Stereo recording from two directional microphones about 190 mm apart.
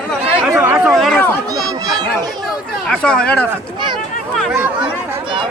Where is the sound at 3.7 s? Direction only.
25° right (ahead or behind).